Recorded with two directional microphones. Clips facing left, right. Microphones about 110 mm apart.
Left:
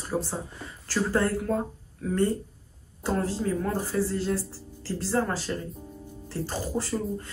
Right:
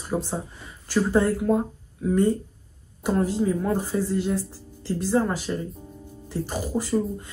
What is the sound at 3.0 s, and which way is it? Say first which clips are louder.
Speech: right 4 dB; 15° right (ahead or behind).